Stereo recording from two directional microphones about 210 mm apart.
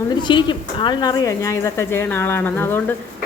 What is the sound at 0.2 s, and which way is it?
Speech, 20° left (ahead or behind).